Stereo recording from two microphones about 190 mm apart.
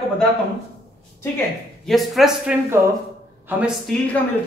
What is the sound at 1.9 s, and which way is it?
Speech, centre (ahead or behind).